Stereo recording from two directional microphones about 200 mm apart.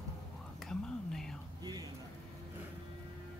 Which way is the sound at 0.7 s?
Centre (ahead or behind).